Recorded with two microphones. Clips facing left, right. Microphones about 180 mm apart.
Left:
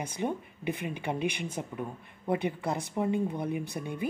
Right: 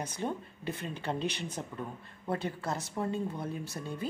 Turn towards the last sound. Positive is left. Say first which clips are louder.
# left 4 dB
turn(degrees=15)  # may be behind; listen again after turning